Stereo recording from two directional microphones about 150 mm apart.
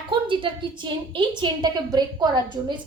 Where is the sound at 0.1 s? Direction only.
35° right (ahead or behind).